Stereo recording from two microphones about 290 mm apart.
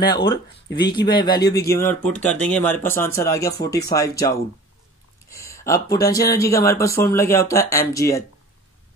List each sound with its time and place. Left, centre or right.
0.1 s speech: centre
0.7 s speech: left
0.9 s speech: centre
5.3 s a sound: centre
5.9 s speech: centre